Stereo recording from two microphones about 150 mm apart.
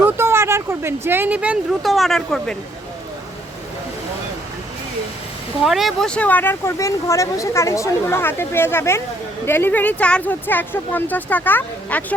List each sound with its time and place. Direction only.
0.0 s speech: 15° right (ahead or behind); by 2.6 s centre (ahead or behind)
5.6 s speech: centre (ahead or behind)